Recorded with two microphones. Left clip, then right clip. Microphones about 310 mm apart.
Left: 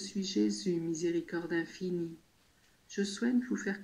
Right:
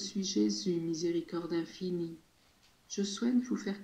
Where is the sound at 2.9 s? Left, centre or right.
Centre.